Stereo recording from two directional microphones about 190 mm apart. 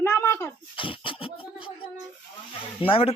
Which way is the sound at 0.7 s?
25° left (ahead or behind).